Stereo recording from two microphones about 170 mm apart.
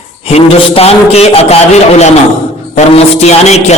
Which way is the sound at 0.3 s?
35° left (ahead or behind).